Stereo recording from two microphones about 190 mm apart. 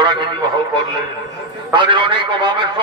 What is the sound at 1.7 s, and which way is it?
Speech, 25° right (ahead or behind).